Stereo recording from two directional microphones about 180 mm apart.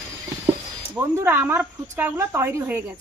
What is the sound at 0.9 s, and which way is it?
Speech, 10° right (ahead or behind).